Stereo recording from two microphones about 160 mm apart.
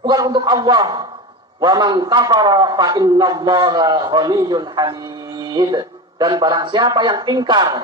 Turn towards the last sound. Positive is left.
turn(degrees=-25)  # may be behind; listen again after turning